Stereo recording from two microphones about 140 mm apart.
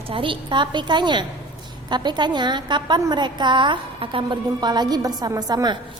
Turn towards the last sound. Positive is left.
turn(degrees=-30)  # may be behind; listen again after turning